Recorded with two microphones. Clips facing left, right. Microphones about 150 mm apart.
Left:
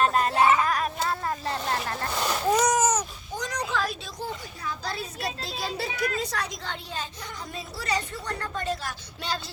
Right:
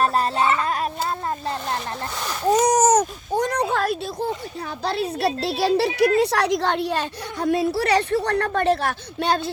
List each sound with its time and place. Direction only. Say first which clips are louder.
0.0 s a sound: right 1 dB; 35° right (ahead or behind)
2.7 s baby cry: right 7 dB; 50° right (ahead or behind)
4.6 s a woman's voice: right 8 dB; 60° right (ahead or behind)